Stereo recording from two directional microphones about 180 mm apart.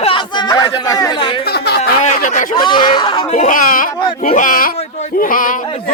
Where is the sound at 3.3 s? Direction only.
45° left (ahead or behind).